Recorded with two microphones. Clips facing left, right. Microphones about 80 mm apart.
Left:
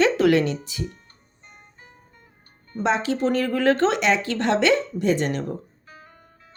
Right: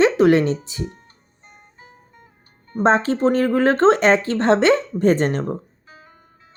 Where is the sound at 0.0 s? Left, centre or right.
Right.